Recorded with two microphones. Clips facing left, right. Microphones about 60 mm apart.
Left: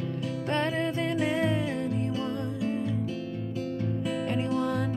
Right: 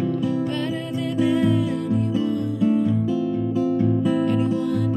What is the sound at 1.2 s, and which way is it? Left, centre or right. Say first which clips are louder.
Music: right 10 dB; left.